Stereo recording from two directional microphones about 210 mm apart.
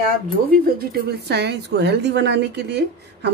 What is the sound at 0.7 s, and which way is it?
Speech, 45° right (ahead or behind).